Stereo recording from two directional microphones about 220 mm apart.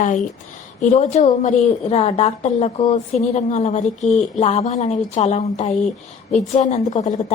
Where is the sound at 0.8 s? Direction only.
35° left (ahead or behind).